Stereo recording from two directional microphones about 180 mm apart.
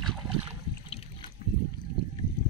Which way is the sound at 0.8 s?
35° left (ahead or behind).